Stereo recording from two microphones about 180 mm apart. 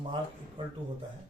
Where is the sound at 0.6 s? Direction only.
25° right (ahead or behind).